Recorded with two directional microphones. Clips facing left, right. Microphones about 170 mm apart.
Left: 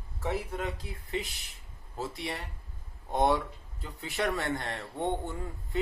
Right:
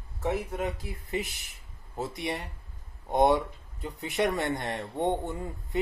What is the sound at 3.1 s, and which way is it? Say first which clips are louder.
Speech: right 4 dB; 20° right (ahead or behind).